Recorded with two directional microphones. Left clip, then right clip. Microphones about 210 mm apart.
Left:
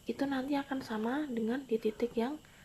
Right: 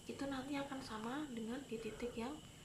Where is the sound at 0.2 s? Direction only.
40° left (ahead or behind).